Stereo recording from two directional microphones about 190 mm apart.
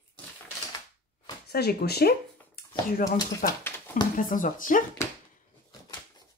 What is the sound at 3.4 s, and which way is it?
Speech, 45° left (ahead or behind).